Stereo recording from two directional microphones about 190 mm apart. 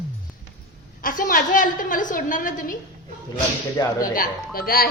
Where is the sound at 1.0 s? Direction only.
50° left (ahead or behind).